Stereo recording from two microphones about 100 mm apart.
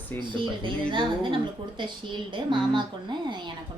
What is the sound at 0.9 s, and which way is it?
A woman's voice, 55° right (ahead or behind).